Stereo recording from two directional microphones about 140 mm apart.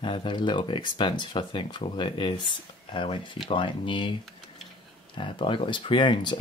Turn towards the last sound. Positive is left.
turn(degrees=35)  # may be behind; listen again after turning